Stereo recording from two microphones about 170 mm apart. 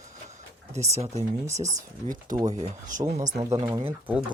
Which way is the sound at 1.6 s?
20° right (ahead or behind).